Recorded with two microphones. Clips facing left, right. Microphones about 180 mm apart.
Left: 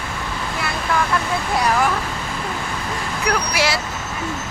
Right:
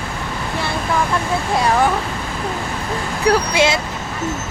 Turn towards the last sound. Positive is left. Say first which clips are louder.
# right 5 dB
turn(degrees=-25)  # may be behind; listen again after turning